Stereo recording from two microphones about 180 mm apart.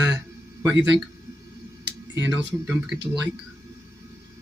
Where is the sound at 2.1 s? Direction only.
15° right (ahead or behind).